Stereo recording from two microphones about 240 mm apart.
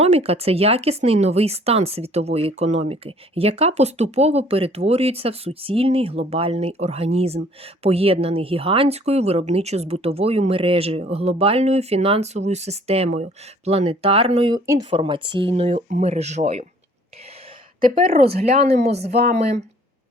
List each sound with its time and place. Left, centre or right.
0.0 s speech: right
17.9 s speech: right